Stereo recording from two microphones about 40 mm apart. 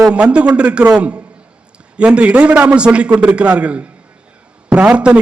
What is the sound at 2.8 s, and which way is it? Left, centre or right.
A man's voice, right.